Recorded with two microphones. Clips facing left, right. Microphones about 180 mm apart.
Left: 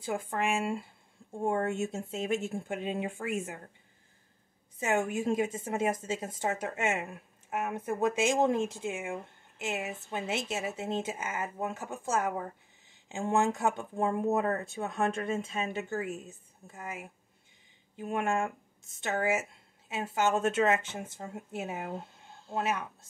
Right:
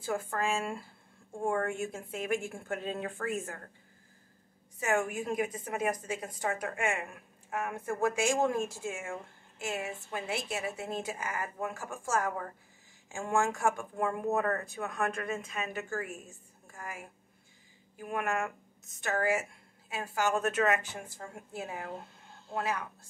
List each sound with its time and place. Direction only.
0.0 s a woman's voice: 20° left (ahead or behind)
4.7 s a woman's voice: 25° left (ahead or behind)